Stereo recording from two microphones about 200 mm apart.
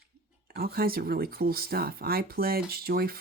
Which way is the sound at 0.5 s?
50° right (ahead or behind).